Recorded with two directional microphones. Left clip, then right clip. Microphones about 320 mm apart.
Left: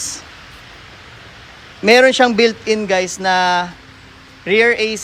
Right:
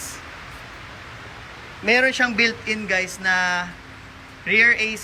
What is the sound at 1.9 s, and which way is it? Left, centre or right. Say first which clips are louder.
Speech: left 8 dB; centre.